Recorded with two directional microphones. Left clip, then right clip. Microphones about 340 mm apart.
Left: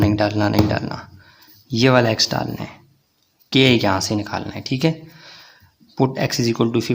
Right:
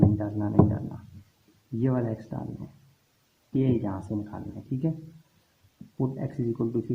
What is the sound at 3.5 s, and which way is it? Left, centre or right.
Speech, left.